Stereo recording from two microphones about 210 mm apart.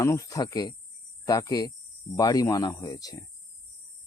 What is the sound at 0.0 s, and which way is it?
Speech, 15° left (ahead or behind).